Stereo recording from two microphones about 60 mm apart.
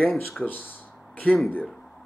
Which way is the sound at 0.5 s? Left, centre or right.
Left.